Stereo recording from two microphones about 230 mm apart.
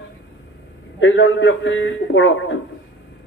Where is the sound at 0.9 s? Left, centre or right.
Left.